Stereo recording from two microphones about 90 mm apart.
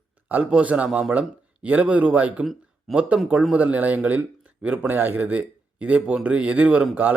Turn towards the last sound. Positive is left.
turn(degrees=-15)  # may be behind; listen again after turning